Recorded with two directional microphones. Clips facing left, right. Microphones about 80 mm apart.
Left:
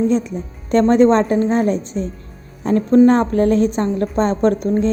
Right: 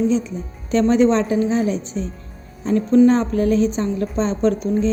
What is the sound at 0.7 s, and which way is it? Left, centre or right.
A woman's voice, left.